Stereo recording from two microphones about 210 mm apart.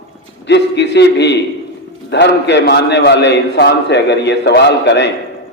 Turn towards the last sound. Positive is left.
turn(degrees=55)  # may be behind; listen again after turning